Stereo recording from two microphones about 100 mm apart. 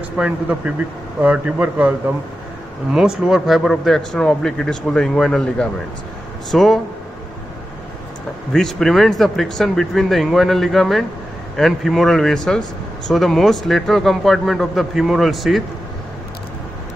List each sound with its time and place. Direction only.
0.2 s a man's voice: 10° right (ahead or behind); by 6.8 s 5° left (ahead or behind)
8.5 s a man's voice: 5° left (ahead or behind)